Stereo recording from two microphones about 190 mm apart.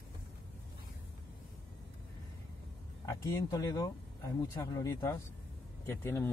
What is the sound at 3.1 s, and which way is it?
Speech, 15° left (ahead or behind).